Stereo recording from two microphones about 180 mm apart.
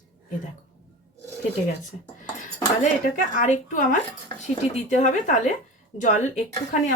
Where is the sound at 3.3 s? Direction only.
45° left (ahead or behind).